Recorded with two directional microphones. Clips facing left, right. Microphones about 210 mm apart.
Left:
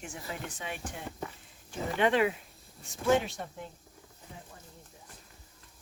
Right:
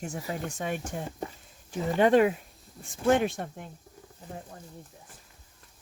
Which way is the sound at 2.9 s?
55° right (ahead or behind).